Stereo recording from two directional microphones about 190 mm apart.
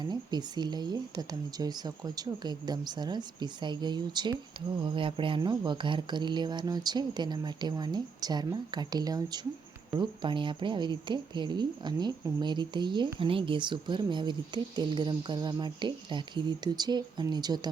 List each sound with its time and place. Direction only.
0.0 s speech: 20° right (ahead or behind)